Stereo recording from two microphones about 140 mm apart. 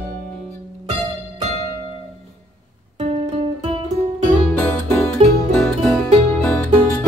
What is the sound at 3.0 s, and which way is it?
Guitar, 40° right (ahead or behind).